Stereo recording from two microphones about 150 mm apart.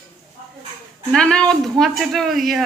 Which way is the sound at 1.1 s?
5° left (ahead or behind).